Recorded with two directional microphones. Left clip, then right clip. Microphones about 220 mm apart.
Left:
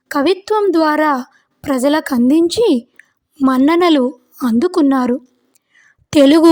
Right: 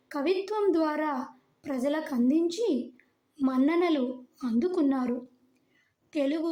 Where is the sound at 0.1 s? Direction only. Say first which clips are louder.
Left 14 dB; 50° left (ahead or behind).